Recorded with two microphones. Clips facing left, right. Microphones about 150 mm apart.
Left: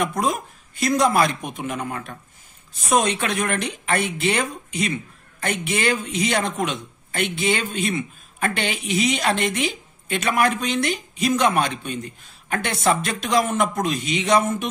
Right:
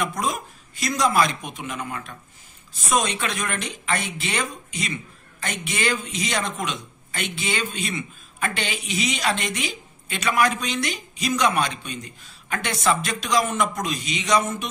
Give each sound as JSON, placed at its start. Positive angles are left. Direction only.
{"t": 0.0, "sound": "a woman's voice", "side_deg": 55}
{"t": 2.9, "sound": "a man's voice", "side_deg": 55}